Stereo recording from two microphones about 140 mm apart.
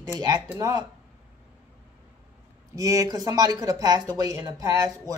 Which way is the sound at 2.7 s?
25° right (ahead or behind).